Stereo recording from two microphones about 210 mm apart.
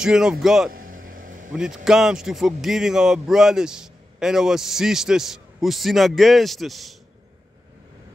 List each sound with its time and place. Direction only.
0.0 s speech: 5° right (ahead or behind)
0.7 s vehicle: 40° right (ahead or behind)
1.5 s speech: 5° right (ahead or behind)